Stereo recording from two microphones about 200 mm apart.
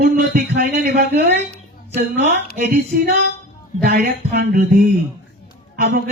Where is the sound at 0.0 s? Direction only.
45° right (ahead or behind).